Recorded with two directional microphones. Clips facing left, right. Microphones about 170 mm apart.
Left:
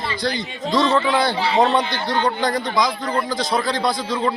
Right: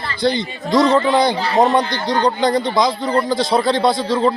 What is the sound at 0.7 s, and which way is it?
A man's voice, 20° right (ahead or behind).